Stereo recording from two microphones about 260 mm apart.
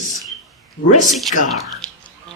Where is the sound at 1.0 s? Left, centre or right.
Centre.